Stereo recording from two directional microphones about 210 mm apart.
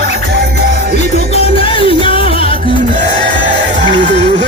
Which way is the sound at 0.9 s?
30° left (ahead or behind).